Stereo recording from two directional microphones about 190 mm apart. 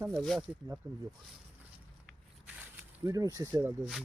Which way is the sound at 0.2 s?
Centre (ahead or behind).